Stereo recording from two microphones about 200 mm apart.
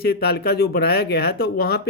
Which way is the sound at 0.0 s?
50° left (ahead or behind).